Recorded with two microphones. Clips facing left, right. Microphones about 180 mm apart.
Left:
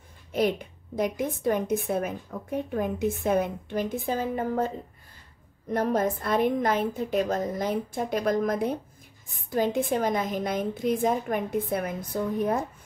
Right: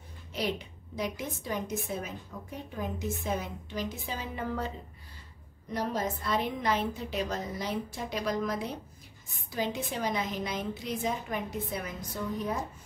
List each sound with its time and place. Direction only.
0.3 s a woman's voice: 50° left (ahead or behind)